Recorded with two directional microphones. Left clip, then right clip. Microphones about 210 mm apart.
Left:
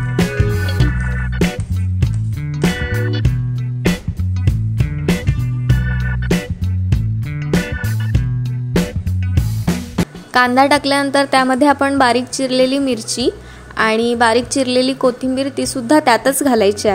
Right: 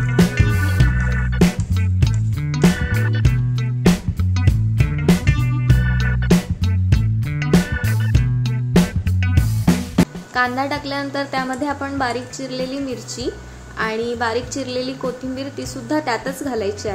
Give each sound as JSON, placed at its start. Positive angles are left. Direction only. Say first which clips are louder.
{"t": 0.1, "sound": "music", "louder": "left 1 dB", "side_deg": 0}
{"t": 10.3, "sound": "a woman's voice", "louder": "left 9 dB", "side_deg": 50}